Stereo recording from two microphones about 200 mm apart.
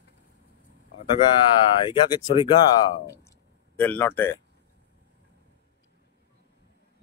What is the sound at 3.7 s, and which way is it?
Speech, 10° left (ahead or behind).